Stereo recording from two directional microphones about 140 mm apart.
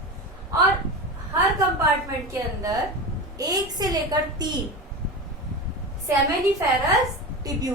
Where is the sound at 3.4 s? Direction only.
25° right (ahead or behind).